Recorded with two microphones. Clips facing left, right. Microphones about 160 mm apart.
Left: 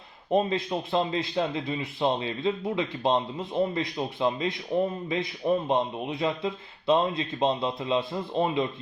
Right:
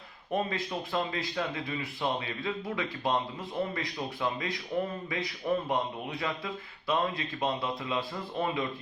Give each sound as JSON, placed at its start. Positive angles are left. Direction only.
{"t": 0.3, "sound": "speech", "side_deg": 25}